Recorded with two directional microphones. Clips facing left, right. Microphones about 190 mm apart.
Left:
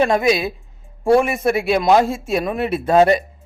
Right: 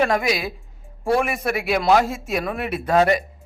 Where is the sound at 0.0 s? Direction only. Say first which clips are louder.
Left 4 dB; 25° left (ahead or behind).